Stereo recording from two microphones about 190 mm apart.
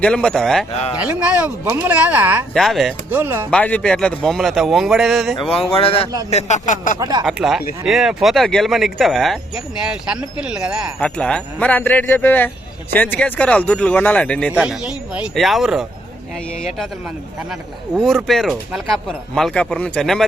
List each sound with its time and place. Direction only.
0.0 s speech: 5° left (ahead or behind)
2.5 s speech: centre (ahead or behind)
3.2 s speech: 10° right (ahead or behind)
3.5 s speech: 5° left (ahead or behind)
5.5 s speech: 30° left (ahead or behind)
7.0 s speech: 20° right (ahead or behind)
7.3 s speech: centre (ahead or behind)
14.5 s speech: 5° right (ahead or behind)